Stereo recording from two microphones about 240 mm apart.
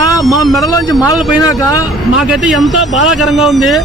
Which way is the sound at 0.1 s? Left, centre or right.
Centre.